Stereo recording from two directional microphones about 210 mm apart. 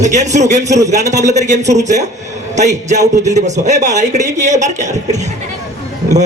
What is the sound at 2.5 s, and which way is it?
A man's voice, 35° right (ahead or behind).